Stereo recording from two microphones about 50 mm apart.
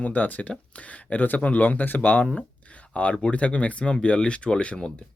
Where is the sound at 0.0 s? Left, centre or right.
Left.